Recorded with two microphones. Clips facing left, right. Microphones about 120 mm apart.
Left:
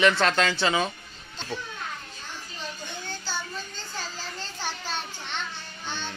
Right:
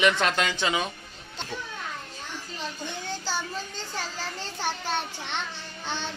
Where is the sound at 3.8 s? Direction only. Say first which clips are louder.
Right 3 dB; 70° right (ahead or behind).